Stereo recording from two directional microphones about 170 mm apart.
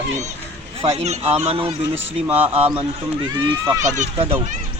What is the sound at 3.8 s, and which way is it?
Speech, 45° right (ahead or behind).